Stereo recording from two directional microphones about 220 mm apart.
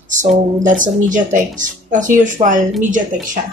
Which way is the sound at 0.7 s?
35° right (ahead or behind).